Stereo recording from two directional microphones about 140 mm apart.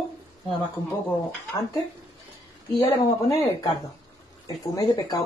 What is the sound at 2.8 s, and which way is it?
Speech, 25° left (ahead or behind).